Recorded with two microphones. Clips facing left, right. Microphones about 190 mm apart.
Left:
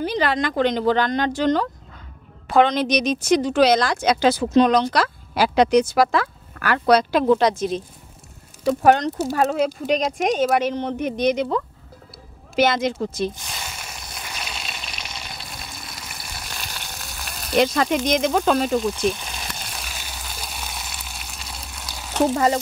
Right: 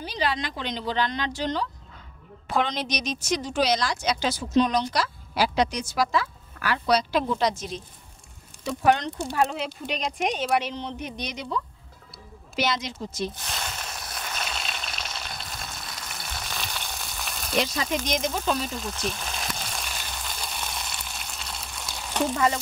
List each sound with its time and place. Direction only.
0.0 s speech: 55° left (ahead or behind)
2.4 s a woman's voice: 65° left (ahead or behind)
8.6 s a woman's voice: 45° left (ahead or behind)
13.4 s a sound: 5° left (ahead or behind)
14.1 s frying: 5° left (ahead or behind)
17.6 s a woman's voice: 60° left (ahead or behind)
18.8 s frying: 5° left (ahead or behind)
22.3 s stir: 40° left (ahead or behind)